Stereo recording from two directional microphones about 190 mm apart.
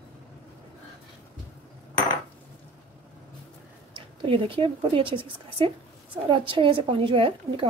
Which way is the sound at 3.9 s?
30° right (ahead or behind).